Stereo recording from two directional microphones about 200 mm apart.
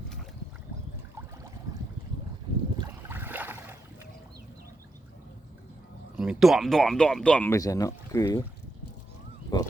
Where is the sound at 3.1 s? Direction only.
10° right (ahead or behind).